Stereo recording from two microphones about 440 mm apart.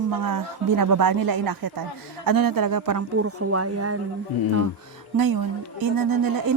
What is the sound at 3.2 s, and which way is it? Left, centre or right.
Speech, right.